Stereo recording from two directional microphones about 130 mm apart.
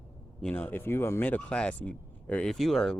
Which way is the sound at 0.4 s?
10° left (ahead or behind).